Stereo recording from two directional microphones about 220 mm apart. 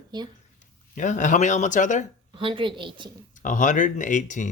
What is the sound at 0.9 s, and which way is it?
Speech, 35° left (ahead or behind).